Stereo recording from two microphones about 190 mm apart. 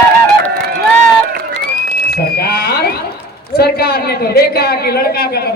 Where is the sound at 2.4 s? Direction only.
55° left (ahead or behind).